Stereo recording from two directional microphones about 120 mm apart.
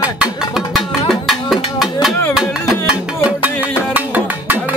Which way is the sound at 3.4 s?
15° right (ahead or behind).